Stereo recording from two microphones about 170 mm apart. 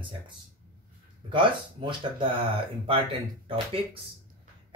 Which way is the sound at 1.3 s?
30° right (ahead or behind).